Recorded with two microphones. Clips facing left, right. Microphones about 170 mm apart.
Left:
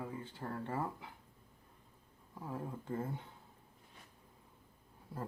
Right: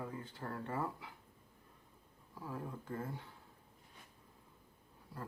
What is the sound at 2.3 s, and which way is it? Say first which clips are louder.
Speech: left 2 dB; 25° left (ahead or behind).